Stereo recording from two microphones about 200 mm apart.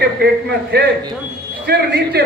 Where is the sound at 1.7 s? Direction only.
55° right (ahead or behind).